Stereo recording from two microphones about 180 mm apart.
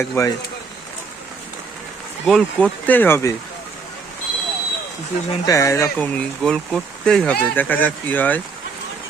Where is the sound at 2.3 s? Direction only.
5° left (ahead or behind).